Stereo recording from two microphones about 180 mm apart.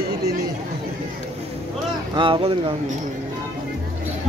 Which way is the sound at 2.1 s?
30° right (ahead or behind).